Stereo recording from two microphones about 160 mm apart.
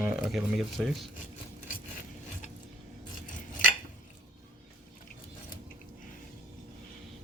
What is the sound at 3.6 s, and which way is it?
Dishes, 60° left (ahead or behind).